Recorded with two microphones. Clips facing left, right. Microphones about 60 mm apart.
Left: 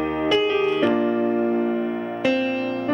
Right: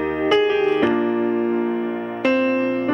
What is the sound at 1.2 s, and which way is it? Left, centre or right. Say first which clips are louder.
Music: right 1 dB; right.